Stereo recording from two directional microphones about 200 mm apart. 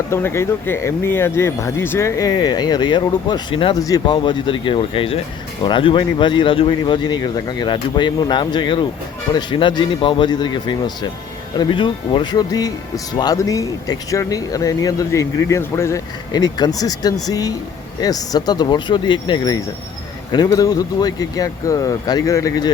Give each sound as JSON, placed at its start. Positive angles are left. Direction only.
{"t": 0.1, "sound": "speech", "side_deg": 10}